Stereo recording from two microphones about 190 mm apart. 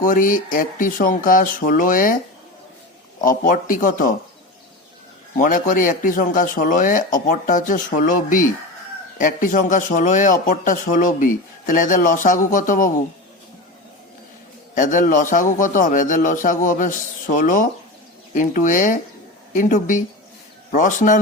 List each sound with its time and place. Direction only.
0.0 s a man's voice: 45° left (ahead or behind)
3.2 s a man's voice: 45° left (ahead or behind)
5.4 s a man's voice: 45° left (ahead or behind)
14.8 s a man's voice: 40° left (ahead or behind)